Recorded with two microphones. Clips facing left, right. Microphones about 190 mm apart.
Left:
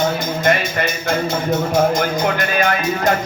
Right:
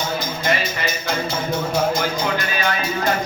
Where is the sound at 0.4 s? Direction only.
55° left (ahead or behind).